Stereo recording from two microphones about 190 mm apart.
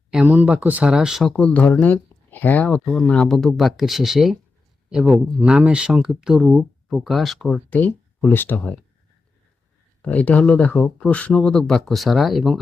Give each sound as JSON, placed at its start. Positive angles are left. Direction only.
{"t": 0.1, "sound": "speech", "side_deg": -5}
{"t": 10.0, "sound": "speech", "side_deg": 5}